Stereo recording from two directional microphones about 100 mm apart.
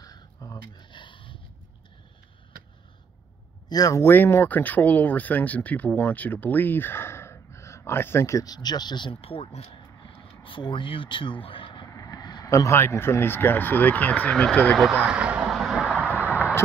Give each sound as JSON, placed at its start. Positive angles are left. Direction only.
{"t": 0.0, "sound": "a sound", "side_deg": 35}
{"t": 0.7, "sound": "a sound", "side_deg": 55}
{"t": 3.6, "sound": "speech", "side_deg": 40}
{"t": 4.0, "sound": "speech", "side_deg": 20}
{"t": 9.2, "sound": "speech", "side_deg": 75}
{"t": 11.9, "sound": "vehicle", "side_deg": 40}
{"t": 12.4, "sound": "speech", "side_deg": 30}
{"t": 15.0, "sound": "vehicle", "side_deg": -10}
{"t": 16.0, "sound": "a sound", "side_deg": -15}